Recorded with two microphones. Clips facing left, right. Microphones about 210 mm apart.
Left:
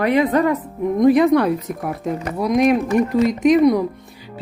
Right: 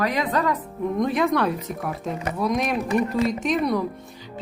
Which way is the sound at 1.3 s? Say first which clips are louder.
Left 6 dB; 10° left (ahead or behind).